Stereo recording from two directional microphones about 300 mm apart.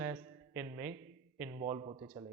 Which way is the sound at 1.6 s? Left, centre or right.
Centre.